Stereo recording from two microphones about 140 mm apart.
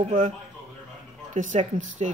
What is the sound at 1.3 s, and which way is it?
Speech, 60° right (ahead or behind).